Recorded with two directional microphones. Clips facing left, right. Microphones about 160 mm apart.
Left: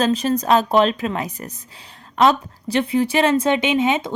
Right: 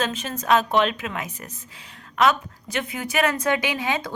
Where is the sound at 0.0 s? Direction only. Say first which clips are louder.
Left 9 dB; 35° left (ahead or behind).